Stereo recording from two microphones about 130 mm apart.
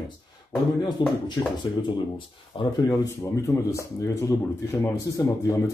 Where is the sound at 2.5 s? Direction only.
40° left (ahead or behind).